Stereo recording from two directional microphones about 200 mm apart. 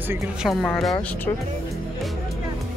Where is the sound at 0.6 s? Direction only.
5° left (ahead or behind).